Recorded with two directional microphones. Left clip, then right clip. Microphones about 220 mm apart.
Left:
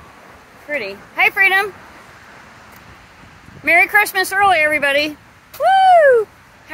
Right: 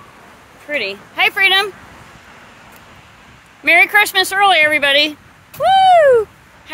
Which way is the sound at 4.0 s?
25° right (ahead or behind).